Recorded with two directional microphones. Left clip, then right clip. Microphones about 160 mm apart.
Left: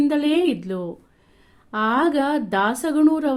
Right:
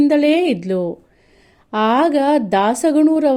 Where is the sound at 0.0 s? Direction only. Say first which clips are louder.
Right 6 dB; 35° right (ahead or behind).